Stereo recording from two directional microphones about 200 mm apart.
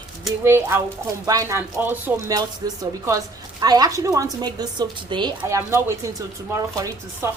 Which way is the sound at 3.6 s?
20° right (ahead or behind).